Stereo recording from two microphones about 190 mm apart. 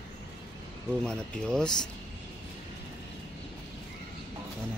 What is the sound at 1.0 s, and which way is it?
Speech, 5° left (ahead or behind).